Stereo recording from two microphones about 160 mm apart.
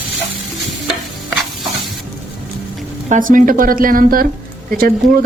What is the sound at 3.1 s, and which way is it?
Speech, 55° right (ahead or behind).